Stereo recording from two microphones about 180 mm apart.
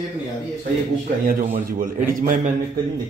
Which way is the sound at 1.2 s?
50° right (ahead or behind).